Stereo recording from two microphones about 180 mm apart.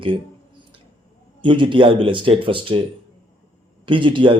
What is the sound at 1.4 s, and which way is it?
A man's voice, 25° right (ahead or behind).